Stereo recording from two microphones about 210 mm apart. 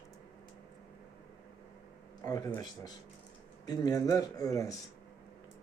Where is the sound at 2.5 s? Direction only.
15° left (ahead or behind).